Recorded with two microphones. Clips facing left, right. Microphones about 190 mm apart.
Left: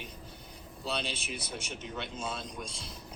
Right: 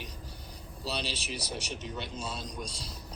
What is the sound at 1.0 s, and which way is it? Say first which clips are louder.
Speech: right 2 dB; 50° left (ahead or behind).